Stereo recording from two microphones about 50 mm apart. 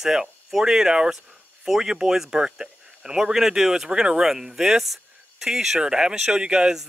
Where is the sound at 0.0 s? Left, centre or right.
Centre.